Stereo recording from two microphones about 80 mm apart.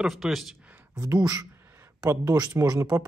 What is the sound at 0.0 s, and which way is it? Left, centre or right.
Speech, centre.